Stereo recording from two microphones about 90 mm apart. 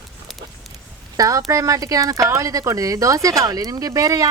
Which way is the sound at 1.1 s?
40° right (ahead or behind).